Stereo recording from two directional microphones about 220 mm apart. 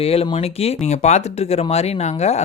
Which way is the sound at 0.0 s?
25° left (ahead or behind).